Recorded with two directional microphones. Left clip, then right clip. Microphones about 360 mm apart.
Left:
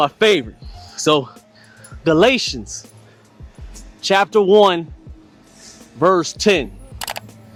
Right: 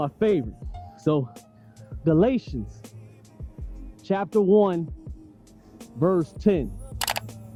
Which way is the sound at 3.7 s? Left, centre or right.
Centre.